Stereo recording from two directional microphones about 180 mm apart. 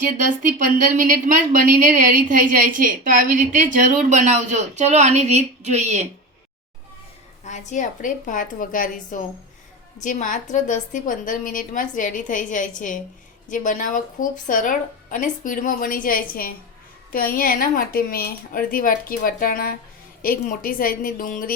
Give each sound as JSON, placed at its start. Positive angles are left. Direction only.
{"t": 0.2, "sound": "a woman's voice", "side_deg": -45}
{"t": 7.4, "sound": "speech", "side_deg": 40}